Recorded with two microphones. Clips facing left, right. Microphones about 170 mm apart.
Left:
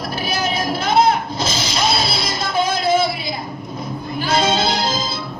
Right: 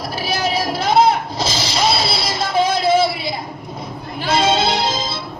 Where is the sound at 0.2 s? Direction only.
35° right (ahead or behind).